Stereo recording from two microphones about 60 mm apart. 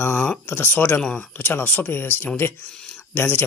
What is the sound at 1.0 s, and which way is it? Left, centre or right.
Speech, left.